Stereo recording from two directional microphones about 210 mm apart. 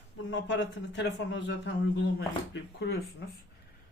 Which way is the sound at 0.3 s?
55° left (ahead or behind).